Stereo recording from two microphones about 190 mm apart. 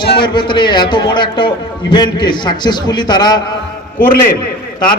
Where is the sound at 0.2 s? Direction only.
25° left (ahead or behind).